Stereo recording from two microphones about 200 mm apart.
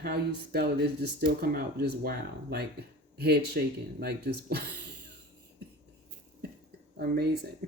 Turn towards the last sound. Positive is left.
turn(degrees=-50)  # may be behind; listen again after turning